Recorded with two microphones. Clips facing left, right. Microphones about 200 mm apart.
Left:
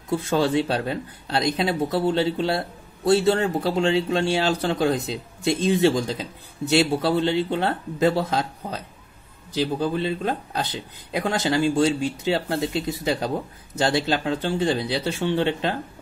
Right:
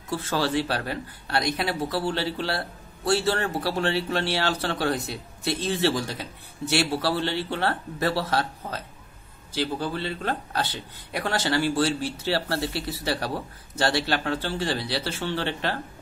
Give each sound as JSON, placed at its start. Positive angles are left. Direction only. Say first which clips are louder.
{"t": 0.1, "sound": "speech", "louder": "left 4 dB", "side_deg": 20}